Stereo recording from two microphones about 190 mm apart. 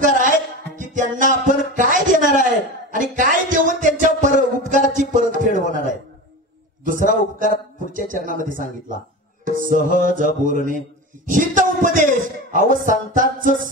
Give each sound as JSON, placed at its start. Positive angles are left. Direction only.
{"t": 0.7, "sound": "music", "side_deg": -45}
{"t": 6.8, "sound": "a sound", "side_deg": -45}
{"t": 9.6, "sound": "music", "side_deg": -45}